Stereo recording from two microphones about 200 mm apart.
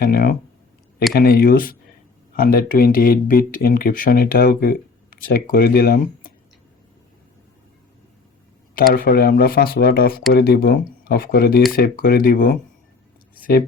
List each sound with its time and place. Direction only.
0.0 s speech: 45° left (ahead or behind)
8.9 s speech: 50° left (ahead or behind)